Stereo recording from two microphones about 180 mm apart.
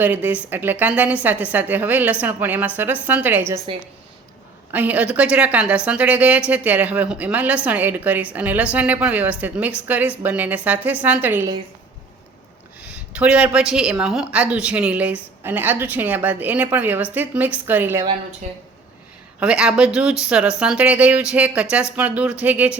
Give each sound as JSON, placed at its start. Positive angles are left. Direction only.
{"t": 0.0, "sound": "a woman's voice", "side_deg": -10}
{"t": 3.7, "sound": "a woman's voice", "side_deg": -30}
{"t": 4.7, "sound": "a woman's voice", "side_deg": -10}
{"t": 12.8, "sound": "a woman's voice", "side_deg": -5}
{"t": 18.4, "sound": "speech", "side_deg": -40}
{"t": 19.4, "sound": "a woman's voice", "side_deg": -5}